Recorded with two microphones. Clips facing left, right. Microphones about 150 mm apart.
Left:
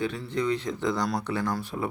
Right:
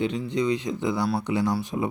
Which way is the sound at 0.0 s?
15° right (ahead or behind).